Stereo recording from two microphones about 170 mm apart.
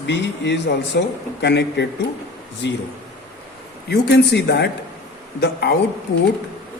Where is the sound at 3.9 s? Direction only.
75° left (ahead or behind).